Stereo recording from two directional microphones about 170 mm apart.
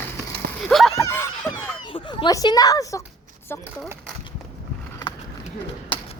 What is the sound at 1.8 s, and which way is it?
A woman's voice, 30° left (ahead or behind).